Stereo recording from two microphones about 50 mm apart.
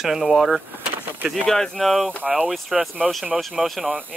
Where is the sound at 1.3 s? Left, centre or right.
Centre.